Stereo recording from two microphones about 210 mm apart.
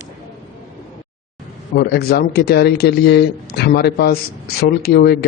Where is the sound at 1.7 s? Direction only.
50° left (ahead or behind).